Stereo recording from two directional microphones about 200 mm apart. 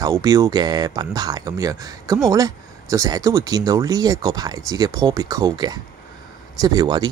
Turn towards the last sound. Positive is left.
turn(degrees=-20)  # may be behind; listen again after turning